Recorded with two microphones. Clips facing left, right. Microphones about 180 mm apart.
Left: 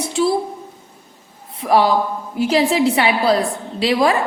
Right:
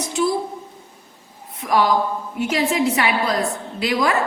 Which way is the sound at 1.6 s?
30° left (ahead or behind).